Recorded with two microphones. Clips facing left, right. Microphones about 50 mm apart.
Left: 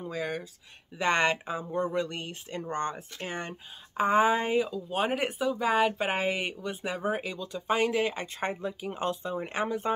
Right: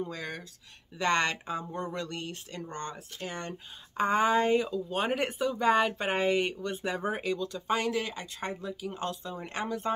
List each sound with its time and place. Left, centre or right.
0.0 s speech: centre; by 3.3 s left
3.3 s speech: centre